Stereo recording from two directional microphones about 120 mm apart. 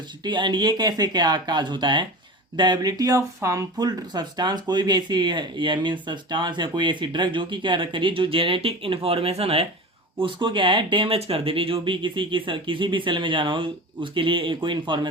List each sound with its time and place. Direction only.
0.3 s speech: 40° right (ahead or behind); by 9.6 s 60° right (ahead or behind)
10.2 s speech: 45° right (ahead or behind)